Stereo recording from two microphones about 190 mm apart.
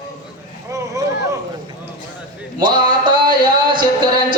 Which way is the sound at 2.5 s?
25° right (ahead or behind).